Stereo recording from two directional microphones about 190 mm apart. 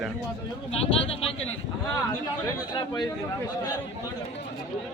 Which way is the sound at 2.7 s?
20° left (ahead or behind).